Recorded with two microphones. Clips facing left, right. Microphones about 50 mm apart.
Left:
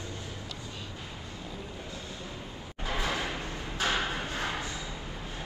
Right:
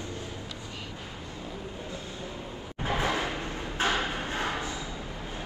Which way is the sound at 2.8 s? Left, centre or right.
Right.